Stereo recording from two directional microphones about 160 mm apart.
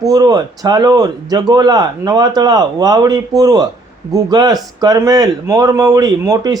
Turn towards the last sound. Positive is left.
turn(degrees=-20)  # may be behind; listen again after turning